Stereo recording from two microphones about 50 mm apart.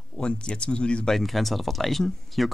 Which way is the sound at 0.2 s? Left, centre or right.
Centre.